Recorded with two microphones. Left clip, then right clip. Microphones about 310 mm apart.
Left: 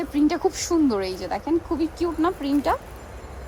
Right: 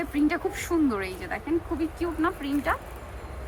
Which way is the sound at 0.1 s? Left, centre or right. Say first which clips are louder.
Left 6 dB; centre.